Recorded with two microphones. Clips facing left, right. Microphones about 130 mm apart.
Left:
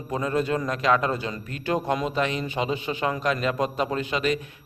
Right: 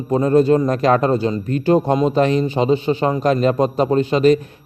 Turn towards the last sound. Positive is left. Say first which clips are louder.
# right 11 dB
turn(degrees=-35)  # may be behind; listen again after turning